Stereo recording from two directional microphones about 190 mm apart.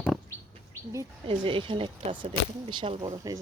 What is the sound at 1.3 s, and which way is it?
Speech, 25° right (ahead or behind).